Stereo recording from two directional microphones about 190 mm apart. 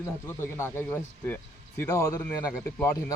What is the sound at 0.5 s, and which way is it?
Speech, 10° left (ahead or behind).